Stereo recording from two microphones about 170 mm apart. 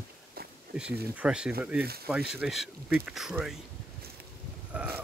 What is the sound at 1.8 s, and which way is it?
Speech, 65° right (ahead or behind).